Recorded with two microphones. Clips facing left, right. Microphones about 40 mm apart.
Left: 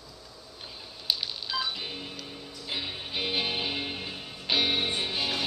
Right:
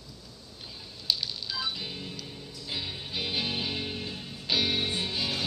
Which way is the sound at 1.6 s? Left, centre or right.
Centre.